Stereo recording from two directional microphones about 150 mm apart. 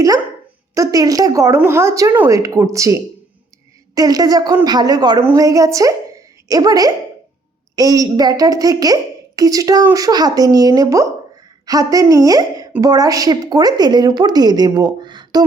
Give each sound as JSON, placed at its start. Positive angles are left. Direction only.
{"t": 0.7, "sound": "a woman's voice", "side_deg": -20}